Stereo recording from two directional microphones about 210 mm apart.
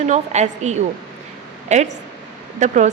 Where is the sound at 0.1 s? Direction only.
35° right (ahead or behind).